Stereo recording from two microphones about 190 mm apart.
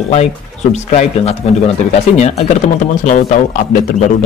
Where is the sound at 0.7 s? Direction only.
35° left (ahead or behind).